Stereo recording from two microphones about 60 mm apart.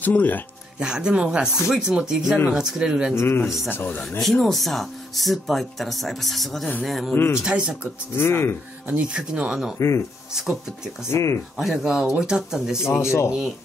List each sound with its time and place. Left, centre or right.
0.0 s speech: left
0.7 s speech: centre
3.2 s speech: left
3.6 s speech: left
4.2 s speech: centre
7.3 s speech: centre
8.2 s speech: left
8.8 s speech: right
9.8 s speech: left
11.1 s speech: left
11.5 s speech: centre
13.0 s speech: left